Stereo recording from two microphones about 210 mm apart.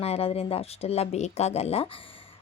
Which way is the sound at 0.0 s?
30° left (ahead or behind).